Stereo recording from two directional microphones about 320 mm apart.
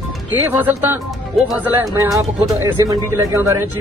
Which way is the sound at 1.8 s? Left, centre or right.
Centre.